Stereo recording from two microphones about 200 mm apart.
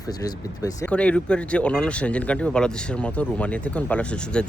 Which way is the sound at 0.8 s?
5° left (ahead or behind).